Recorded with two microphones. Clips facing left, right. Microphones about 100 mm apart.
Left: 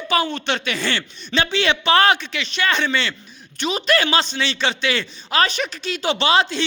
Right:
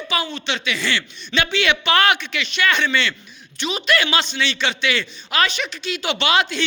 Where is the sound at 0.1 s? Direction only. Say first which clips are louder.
Left 4 dB; 45° left (ahead or behind).